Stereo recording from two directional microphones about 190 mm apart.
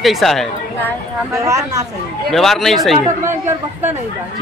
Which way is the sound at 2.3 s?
Centre (ahead or behind).